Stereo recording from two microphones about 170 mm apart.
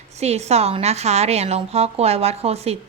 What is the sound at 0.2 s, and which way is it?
A woman's voice, 40° right (ahead or behind).